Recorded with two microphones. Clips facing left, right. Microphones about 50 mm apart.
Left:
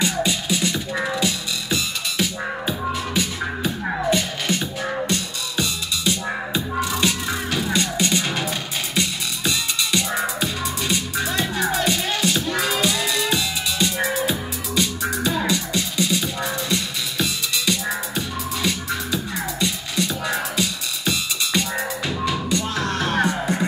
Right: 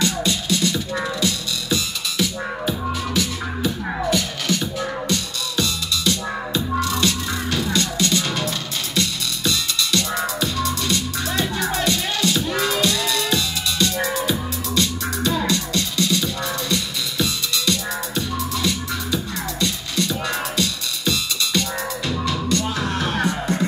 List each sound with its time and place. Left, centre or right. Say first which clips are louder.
0.0 s music: even; centre
22.8 s music: left 1 dB; centre